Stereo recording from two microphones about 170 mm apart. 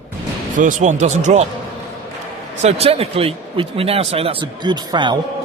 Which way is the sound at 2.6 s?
40° right (ahead or behind).